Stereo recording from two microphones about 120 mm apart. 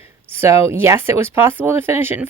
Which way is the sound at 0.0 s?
20° right (ahead or behind).